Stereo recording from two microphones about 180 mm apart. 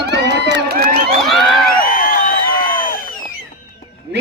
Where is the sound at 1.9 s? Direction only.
55° left (ahead or behind).